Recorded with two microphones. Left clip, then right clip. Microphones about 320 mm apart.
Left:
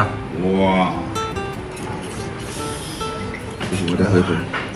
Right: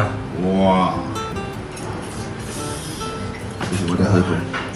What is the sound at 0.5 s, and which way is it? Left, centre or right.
Speech, centre.